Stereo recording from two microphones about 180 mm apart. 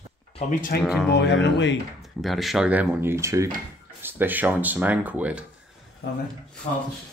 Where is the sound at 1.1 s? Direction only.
75° left (ahead or behind).